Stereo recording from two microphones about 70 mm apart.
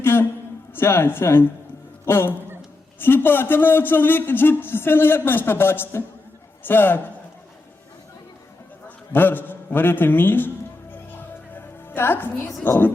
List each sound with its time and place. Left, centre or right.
0.0 s a man's voice: left
9.1 s a man's voice: left
11.5 s music: left
12.7 s a man's voice: left